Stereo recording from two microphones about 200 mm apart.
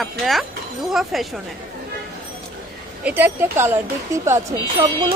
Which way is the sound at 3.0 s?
10° right (ahead or behind).